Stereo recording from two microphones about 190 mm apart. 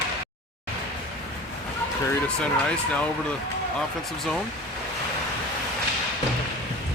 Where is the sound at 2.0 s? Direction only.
5° left (ahead or behind).